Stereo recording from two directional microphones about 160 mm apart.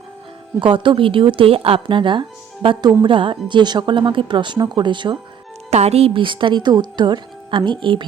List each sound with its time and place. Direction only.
0.6 s speech: 30° right (ahead or behind)
5.7 s speech: 40° right (ahead or behind)